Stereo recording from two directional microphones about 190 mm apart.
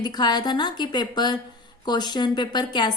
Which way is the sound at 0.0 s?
20° left (ahead or behind).